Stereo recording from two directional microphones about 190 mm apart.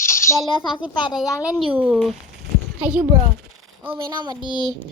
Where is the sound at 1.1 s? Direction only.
Centre (ahead or behind).